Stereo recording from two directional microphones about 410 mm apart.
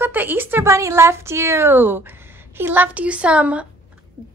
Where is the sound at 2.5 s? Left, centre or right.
Centre.